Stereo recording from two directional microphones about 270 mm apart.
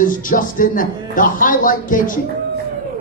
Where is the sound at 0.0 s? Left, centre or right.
Left.